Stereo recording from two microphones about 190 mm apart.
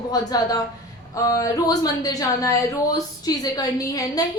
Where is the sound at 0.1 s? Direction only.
20° left (ahead or behind).